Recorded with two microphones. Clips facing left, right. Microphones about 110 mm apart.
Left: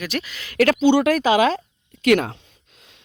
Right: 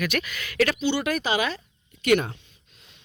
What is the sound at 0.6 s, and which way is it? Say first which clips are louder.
Speech: left 8 dB; 80° left.